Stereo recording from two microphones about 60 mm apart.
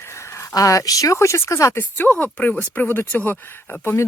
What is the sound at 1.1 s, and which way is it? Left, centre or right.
Speech, left.